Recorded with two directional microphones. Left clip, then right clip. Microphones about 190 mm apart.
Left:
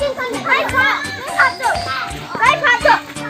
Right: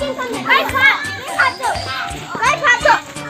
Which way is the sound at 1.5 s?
Centre (ahead or behind).